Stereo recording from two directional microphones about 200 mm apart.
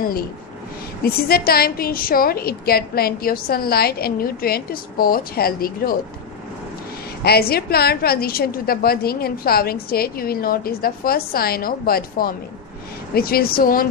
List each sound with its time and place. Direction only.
1.0 s a woman's voice: 50° left (ahead or behind)
7.2 s a woman's voice: 50° left (ahead or behind)